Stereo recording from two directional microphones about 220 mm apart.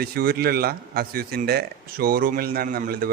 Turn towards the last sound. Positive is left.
turn(degrees=-40)  # may be behind; listen again after turning